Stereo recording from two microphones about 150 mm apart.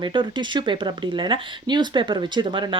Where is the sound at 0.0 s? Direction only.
30° right (ahead or behind).